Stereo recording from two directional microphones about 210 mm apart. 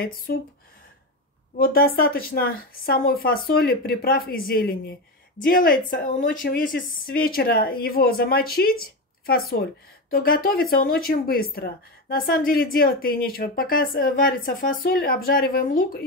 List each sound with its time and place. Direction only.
0.3 s speech: 50° left (ahead or behind)
1.6 s speech: 45° left (ahead or behind)